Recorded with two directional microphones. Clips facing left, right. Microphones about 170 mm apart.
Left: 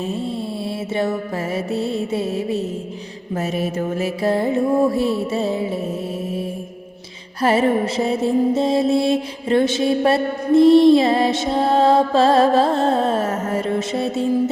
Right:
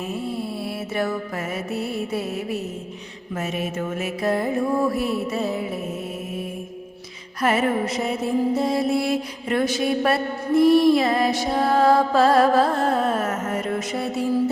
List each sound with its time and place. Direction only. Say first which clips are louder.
0.0 s music: left 3 dB; 25° left (ahead or behind)
3.3 s mantra: left 4 dB; 35° left (ahead or behind)
7.4 s mantra: left 4 dB; 30° left (ahead or behind)